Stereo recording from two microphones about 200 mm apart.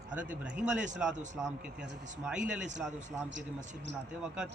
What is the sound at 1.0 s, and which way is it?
A man's voice, 5° right (ahead or behind).